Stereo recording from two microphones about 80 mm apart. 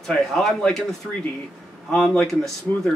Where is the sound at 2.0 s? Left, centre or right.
Centre.